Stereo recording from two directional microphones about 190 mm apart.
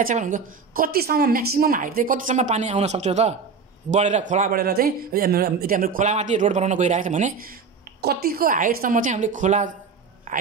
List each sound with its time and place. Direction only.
0.0 s a man's voice: 40° right (ahead or behind)